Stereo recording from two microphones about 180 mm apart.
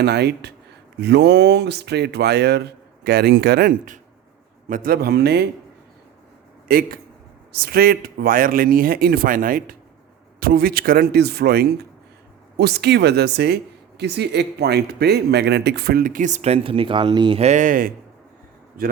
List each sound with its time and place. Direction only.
0.0 s speech: 65° right (ahead or behind)
6.7 s speech: 55° right (ahead or behind)